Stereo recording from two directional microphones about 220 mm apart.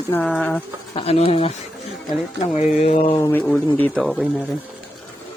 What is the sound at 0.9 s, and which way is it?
Speech, 25° left (ahead or behind).